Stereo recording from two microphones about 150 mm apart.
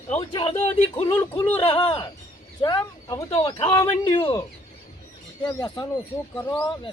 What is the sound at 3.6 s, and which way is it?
Speech, 40° left (ahead or behind).